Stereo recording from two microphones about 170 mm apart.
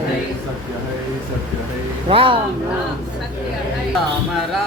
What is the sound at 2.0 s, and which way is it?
Speech, 30° right (ahead or behind).